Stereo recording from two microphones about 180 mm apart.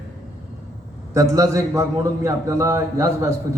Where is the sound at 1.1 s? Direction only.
15° right (ahead or behind).